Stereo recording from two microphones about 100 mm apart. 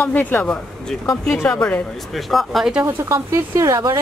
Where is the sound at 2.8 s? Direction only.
30° right (ahead or behind).